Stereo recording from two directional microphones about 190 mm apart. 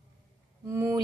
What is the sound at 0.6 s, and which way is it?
Speech, 15° right (ahead or behind).